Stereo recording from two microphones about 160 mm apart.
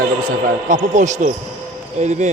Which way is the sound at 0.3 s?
55° right (ahead or behind).